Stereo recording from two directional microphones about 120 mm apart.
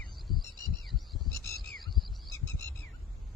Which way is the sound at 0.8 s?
Centre (ahead or behind).